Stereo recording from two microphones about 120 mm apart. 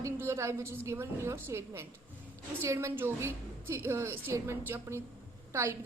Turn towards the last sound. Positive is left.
turn(degrees=-25)  # may be behind; listen again after turning